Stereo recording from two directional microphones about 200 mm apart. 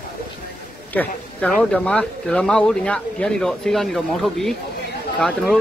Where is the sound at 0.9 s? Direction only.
5° left (ahead or behind).